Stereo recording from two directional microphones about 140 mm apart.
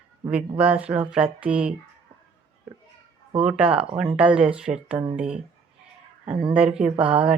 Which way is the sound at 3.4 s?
10° right (ahead or behind).